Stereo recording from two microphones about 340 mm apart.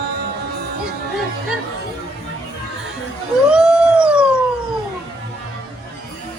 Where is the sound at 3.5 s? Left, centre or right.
Centre.